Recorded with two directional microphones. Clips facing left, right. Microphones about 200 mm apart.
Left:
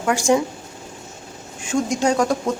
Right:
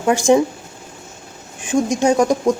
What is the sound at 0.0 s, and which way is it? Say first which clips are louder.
Speech: right 4 dB; 25° right (ahead or behind).